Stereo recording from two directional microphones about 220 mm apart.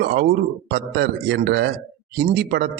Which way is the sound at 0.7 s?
50° right (ahead or behind).